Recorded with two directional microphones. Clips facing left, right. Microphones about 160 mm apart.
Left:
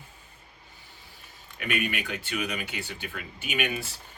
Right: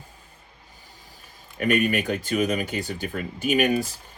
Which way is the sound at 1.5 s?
40° right (ahead or behind).